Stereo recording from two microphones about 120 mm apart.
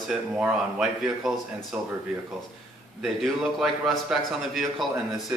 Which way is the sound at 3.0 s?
Centre (ahead or behind).